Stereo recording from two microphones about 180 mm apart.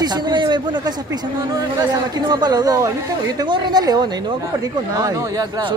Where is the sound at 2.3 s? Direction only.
20° right (ahead or behind).